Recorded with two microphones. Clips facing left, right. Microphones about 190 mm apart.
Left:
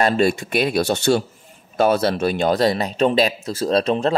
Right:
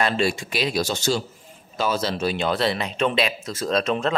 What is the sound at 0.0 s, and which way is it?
Speech, 50° left (ahead or behind).